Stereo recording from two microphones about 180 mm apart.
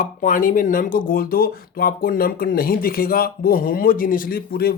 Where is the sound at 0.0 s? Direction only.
45° left (ahead or behind).